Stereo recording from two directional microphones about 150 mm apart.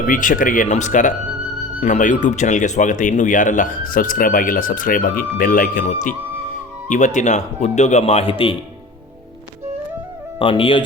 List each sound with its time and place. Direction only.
0.0 s a man's voice: 60° left (ahead or behind); by 8.5 s 35° left (ahead or behind)
10.3 s speech: 35° left (ahead or behind)